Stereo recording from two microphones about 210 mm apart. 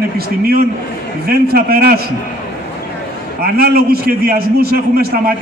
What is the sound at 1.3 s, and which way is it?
Speech, 45° right (ahead or behind).